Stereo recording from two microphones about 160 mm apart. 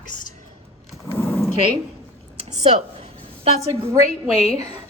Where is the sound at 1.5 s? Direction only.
45° left (ahead or behind).